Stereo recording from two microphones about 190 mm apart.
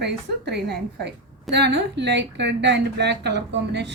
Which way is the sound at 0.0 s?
60° right (ahead or behind).